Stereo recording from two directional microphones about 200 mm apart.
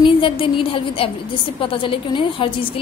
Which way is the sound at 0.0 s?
25° left (ahead or behind).